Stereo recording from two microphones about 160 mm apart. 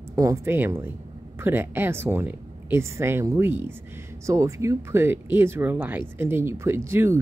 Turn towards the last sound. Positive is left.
turn(degrees=-15)  # may be behind; listen again after turning